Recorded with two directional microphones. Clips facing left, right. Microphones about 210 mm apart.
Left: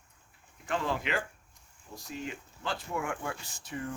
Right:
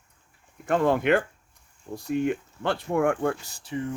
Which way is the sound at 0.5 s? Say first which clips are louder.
Right 10 dB; 50° right (ahead or behind).